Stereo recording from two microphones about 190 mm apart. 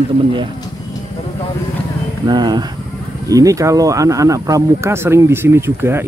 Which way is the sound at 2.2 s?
20° right (ahead or behind).